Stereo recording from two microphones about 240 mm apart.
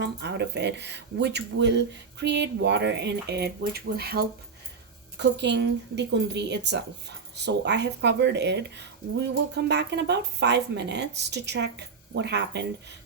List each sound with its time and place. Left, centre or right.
0.0 s speech: right